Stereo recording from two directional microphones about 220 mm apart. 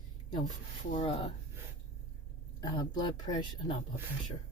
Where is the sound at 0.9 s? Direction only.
25° left (ahead or behind).